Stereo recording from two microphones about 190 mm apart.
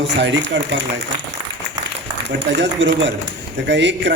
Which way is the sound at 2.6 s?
75° right (ahead or behind).